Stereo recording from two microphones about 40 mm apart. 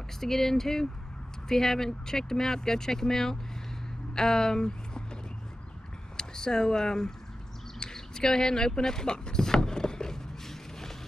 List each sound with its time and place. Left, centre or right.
0.2 s speech: centre
6.1 s speech: centre
7.8 s a sound: centre